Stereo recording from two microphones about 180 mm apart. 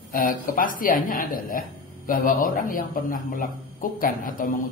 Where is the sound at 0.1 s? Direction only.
50° left (ahead or behind).